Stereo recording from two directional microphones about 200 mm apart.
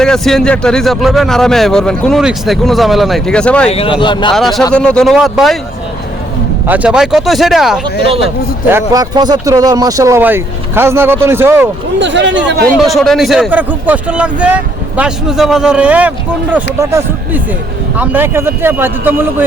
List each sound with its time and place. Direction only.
0.0 s speech: 5° left (ahead or behind)
3.7 s speech: 25° left (ahead or behind)
4.4 s speech: centre (ahead or behind)
6.7 s speech: 5° right (ahead or behind)
8.7 s speech: 20° right (ahead or behind)
11.9 s speech: 65° right (ahead or behind)
12.5 s speech: 50° right (ahead or behind)
12.8 s speech: centre (ahead or behind)